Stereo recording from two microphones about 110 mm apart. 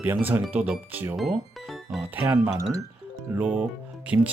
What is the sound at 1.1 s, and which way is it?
Music, centre (ahead or behind).